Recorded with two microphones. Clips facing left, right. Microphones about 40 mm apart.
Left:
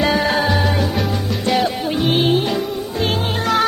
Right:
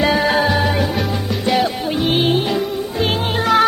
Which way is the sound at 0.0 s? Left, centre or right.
Centre.